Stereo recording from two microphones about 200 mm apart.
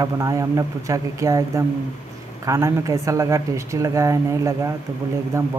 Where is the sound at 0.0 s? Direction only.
15° right (ahead or behind).